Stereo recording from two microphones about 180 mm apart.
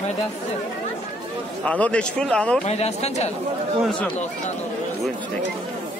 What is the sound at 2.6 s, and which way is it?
Speech, 35° left (ahead or behind).